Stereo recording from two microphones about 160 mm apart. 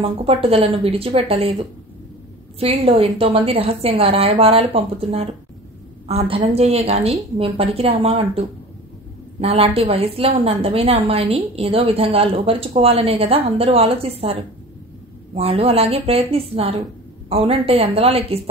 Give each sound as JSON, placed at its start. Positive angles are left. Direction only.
{"t": 0.0, "sound": "a woman's voice", "side_deg": -40}
{"t": 2.6, "sound": "a woman's voice", "side_deg": -40}